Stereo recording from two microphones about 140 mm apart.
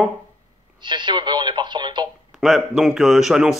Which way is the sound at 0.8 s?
35° right (ahead or behind).